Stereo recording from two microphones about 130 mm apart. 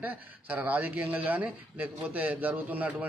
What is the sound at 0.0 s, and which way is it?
Speech, 10° right (ahead or behind).